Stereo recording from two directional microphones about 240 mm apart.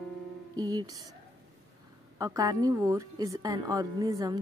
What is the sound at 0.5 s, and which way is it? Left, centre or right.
Music, centre.